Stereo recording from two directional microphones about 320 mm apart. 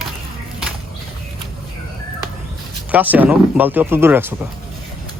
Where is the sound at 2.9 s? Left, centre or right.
Centre.